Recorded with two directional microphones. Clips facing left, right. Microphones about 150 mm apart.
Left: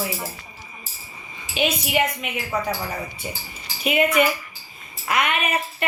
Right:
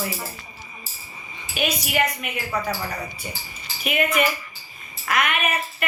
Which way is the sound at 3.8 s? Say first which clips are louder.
Left 3 dB; 25° left (ahead or behind).